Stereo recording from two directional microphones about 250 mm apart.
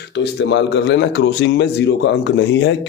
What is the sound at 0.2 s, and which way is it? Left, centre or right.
Speech, left.